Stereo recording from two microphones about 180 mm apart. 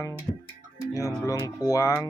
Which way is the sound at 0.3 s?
25° left (ahead or behind).